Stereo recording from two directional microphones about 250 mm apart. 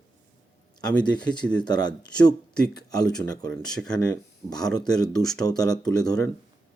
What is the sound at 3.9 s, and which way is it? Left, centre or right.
Speech, centre.